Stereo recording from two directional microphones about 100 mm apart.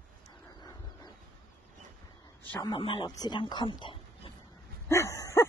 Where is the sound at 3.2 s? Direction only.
45° left (ahead or behind).